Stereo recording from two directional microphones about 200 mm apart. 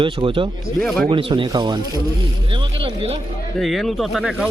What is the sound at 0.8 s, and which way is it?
Speech, 5° left (ahead or behind).